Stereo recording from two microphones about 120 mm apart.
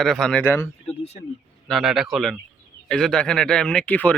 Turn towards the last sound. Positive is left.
turn(degrees=10)  # may be behind; listen again after turning